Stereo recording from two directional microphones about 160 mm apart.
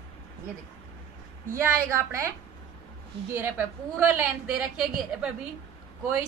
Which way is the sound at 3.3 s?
15° right (ahead or behind).